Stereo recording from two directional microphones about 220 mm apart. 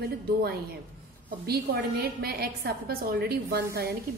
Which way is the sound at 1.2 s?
45° right (ahead or behind).